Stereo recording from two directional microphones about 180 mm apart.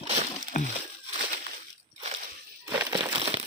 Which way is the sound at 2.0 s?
40° right (ahead or behind).